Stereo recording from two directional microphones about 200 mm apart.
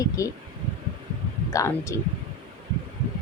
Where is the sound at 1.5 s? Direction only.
15° left (ahead or behind).